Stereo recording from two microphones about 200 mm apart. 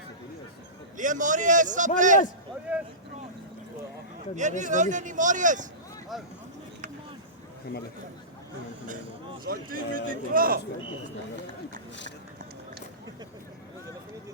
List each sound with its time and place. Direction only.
0.9 s speech: 40° right (ahead or behind)
2.7 s a sound: 10° right (ahead or behind)
4.4 s speech: 40° right (ahead or behind)
9.4 s speech: 45° right (ahead or behind)